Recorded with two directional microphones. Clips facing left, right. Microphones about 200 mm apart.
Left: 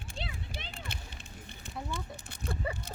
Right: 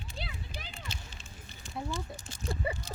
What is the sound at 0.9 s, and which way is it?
Run, 60° left (ahead or behind).